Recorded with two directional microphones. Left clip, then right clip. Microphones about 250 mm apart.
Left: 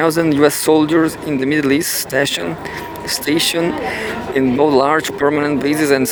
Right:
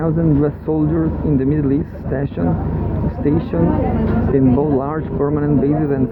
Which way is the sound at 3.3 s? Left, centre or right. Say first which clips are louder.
Left 5 dB; left.